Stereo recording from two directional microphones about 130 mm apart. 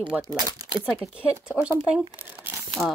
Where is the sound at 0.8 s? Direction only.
5° right (ahead or behind).